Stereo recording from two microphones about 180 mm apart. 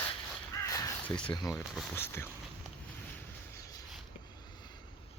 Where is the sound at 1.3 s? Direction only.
20° left (ahead or behind).